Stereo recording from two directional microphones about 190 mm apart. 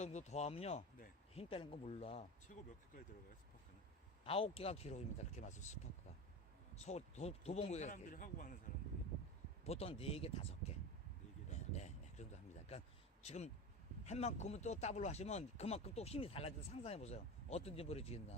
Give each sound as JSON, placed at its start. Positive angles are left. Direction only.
{"t": 0.0, "sound": "speech", "side_deg": 35}
{"t": 2.5, "sound": "speech", "side_deg": 45}
{"t": 4.3, "sound": "speech", "side_deg": 30}
{"t": 9.6, "sound": "speech", "side_deg": 30}
{"t": 11.5, "sound": "a sound", "side_deg": 35}
{"t": 13.2, "sound": "speech", "side_deg": 35}